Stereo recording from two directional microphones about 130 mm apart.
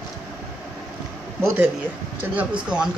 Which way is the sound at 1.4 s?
20° right (ahead or behind).